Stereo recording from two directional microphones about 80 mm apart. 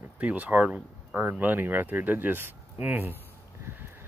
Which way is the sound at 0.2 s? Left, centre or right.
Centre.